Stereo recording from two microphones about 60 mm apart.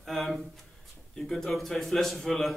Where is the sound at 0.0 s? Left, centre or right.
Centre.